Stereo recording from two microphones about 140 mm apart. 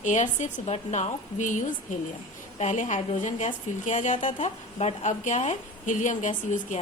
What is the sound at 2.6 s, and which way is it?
A woman's voice, 60° left (ahead or behind).